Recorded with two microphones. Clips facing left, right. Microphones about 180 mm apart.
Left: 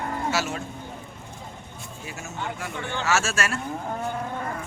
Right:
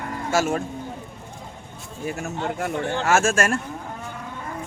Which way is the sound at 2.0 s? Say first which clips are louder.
Right 7 dB; 55° right (ahead or behind).